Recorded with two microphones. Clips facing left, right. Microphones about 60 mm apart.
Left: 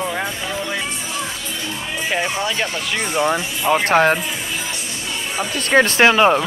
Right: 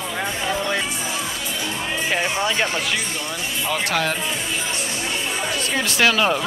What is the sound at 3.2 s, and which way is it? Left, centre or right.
Speech, left.